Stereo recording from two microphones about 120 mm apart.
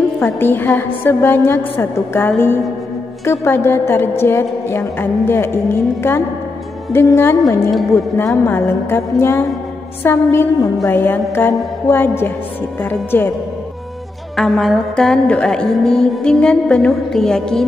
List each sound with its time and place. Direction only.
0.2 s a woman's voice: 20° left (ahead or behind)
6.9 s a woman's voice: 20° left (ahead or behind)
14.3 s music: centre (ahead or behind)